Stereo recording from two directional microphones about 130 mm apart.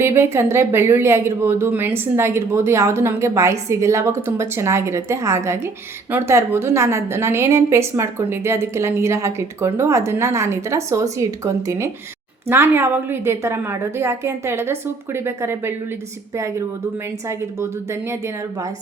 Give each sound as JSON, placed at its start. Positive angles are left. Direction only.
{"t": 0.0, "sound": "a woman's voice", "side_deg": -20}